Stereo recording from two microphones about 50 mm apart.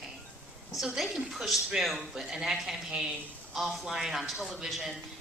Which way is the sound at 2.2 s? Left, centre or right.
Centre.